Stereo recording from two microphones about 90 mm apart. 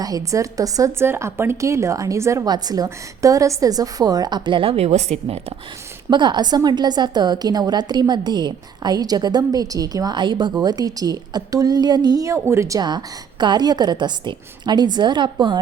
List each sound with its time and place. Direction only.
0.0 s a woman's voice: 40° right (ahead or behind)
0.9 s a woman's voice: 25° right (ahead or behind)
2.4 s a woman's voice: 45° right (ahead or behind); by 4.8 s 80° right
6.1 s a woman's voice: 60° right (ahead or behind); by 10.2 s 45° right (ahead or behind)
10.2 s a woman's voice: 60° right (ahead or behind)
10.6 s a woman's voice: 45° right (ahead or behind)
12.8 s a woman's voice: 55° right (ahead or behind)